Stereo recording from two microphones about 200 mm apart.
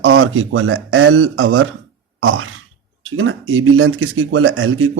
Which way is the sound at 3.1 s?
90° right.